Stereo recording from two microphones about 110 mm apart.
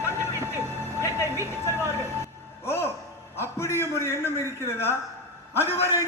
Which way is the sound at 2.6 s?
25° left (ahead or behind).